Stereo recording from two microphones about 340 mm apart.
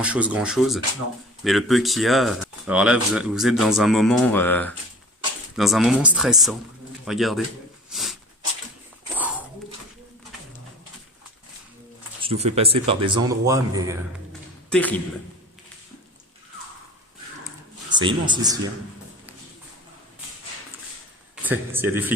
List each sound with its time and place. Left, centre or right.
0.0 s a man's voice: centre
7.9 s a sound: centre
9.1 s a sound: centre
12.2 s speech: centre
14.7 s a man's voice: centre
17.8 s speech: centre
21.4 s speech: centre